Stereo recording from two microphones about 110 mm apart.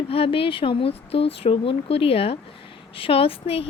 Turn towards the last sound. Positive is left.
turn(degrees=60)  # may be behind; listen again after turning